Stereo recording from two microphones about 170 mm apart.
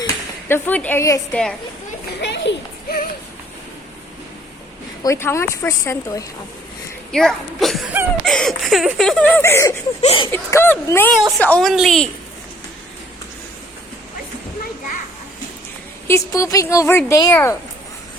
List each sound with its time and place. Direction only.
0.4 s speech: 10° left (ahead or behind)
1.3 s laughter: 5° left (ahead or behind)
2.2 s children playing: 90° left
5.0 s speech: 15° left (ahead or behind)
7.1 s laughter: centre (ahead or behind)
10.0 s speech: 35° left (ahead or behind)
10.3 s speech: 15° left (ahead or behind)
11.3 s laughter: 10° left (ahead or behind)
16.0 s speech: 15° left (ahead or behind)